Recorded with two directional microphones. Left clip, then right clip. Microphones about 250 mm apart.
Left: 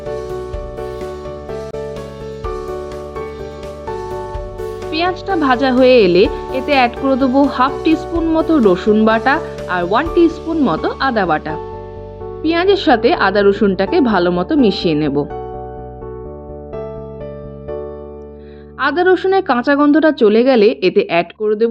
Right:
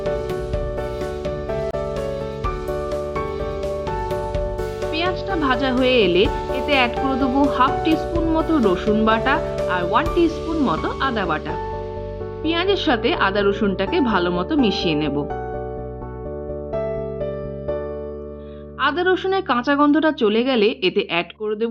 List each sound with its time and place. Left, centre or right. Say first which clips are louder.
4.9 s a woman's voice: left 6 dB; centre
18.8 s a woman's voice: left 6 dB; centre